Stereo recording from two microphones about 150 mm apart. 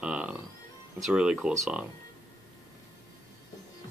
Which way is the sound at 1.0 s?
5° right (ahead or behind).